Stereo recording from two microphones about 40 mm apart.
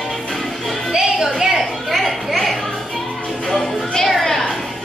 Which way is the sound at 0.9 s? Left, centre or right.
Centre.